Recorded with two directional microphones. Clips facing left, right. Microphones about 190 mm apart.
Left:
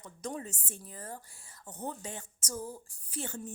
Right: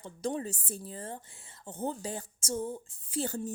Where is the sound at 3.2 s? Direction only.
40° right (ahead or behind).